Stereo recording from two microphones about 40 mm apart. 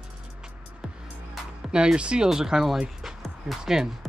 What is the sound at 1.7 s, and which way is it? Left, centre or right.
Speech, right.